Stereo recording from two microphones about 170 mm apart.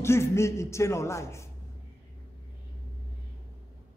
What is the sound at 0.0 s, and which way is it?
A man's voice, 15° left (ahead or behind).